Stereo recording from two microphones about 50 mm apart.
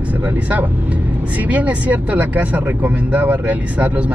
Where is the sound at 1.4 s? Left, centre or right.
Right.